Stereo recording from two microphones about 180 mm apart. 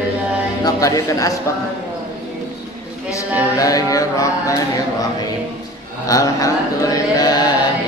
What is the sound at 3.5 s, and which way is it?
A man's voice, 20° left (ahead or behind).